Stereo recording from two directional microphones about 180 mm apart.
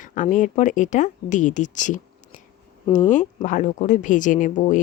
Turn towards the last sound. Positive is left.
turn(degrees=45)  # may be behind; listen again after turning